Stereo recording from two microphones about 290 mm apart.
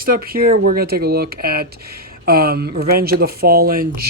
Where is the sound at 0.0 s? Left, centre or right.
Right.